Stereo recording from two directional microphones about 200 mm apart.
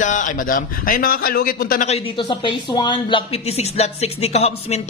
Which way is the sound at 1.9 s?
30° left (ahead or behind).